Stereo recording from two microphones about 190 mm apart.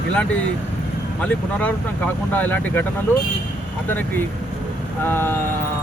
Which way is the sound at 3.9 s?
10° left (ahead or behind).